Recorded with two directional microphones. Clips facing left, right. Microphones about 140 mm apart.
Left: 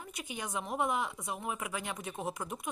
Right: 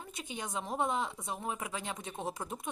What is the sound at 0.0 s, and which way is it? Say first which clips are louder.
A woman's voice: even; 25° right (ahead or behind).